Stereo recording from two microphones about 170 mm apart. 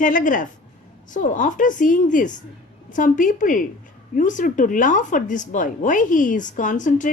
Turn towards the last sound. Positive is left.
turn(degrees=50)  # may be behind; listen again after turning